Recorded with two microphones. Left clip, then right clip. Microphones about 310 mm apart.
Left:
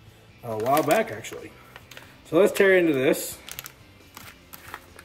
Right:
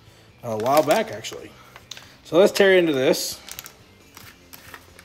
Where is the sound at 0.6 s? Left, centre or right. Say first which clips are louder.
Right 3 dB; centre.